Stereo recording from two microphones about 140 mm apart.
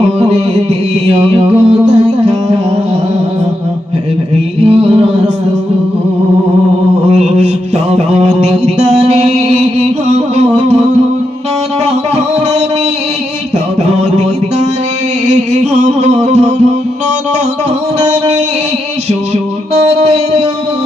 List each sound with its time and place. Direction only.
0.2 s music: 50° right (ahead or behind)
4.6 s music: 45° right (ahead or behind)
7.1 s mantra: 50° right (ahead or behind)
7.9 s music: 50° right (ahead or behind)
15.3 s music: 55° right (ahead or behind)
19.7 s a sound: 45° right (ahead or behind)